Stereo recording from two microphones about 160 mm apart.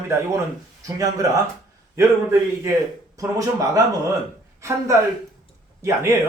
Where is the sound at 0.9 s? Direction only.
20° right (ahead or behind).